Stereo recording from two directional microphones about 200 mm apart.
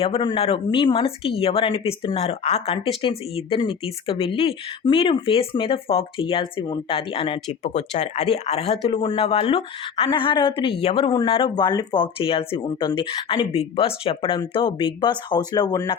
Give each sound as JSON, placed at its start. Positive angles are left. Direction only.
{"t": 0.0, "sound": "speech", "side_deg": 25}